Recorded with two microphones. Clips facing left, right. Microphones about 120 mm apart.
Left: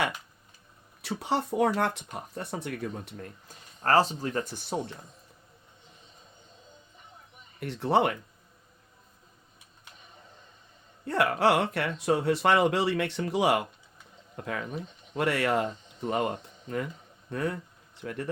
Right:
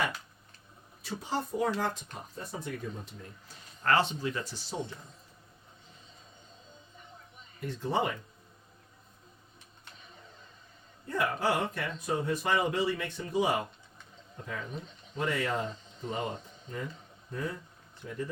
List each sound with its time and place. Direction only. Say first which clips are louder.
1.0 s speech: left 5 dB; 70° left (ahead or behind)
3.8 s speech: left 4 dB; 35° left (ahead or behind); by 4.8 s 55° left (ahead or behind)
7.6 s speech: left 6 dB; 70° left (ahead or behind)
11.0 s speech: left 6 dB; 75° left (ahead or behind)